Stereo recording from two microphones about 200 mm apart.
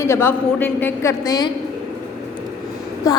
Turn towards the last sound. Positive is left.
turn(degrees=15)  # may be behind; listen again after turning